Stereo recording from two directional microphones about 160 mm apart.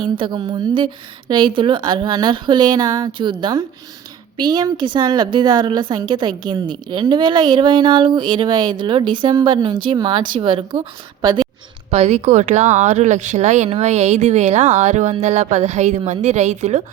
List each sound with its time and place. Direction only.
0.0 s a woman's voice: 30° right (ahead or behind)
11.9 s speech: 40° right (ahead or behind)